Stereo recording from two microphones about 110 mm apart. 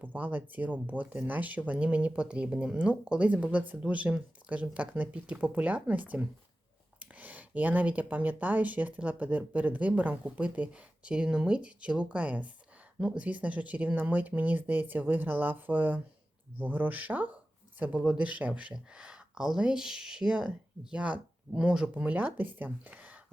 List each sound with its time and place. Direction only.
0.0 s speech: 15° right (ahead or behind)